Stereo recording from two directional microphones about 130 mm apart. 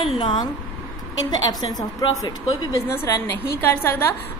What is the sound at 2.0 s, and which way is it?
Speech, 30° left (ahead or behind).